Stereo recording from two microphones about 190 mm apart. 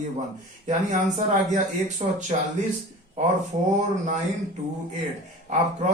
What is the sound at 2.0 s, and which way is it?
Speech, 35° right (ahead or behind).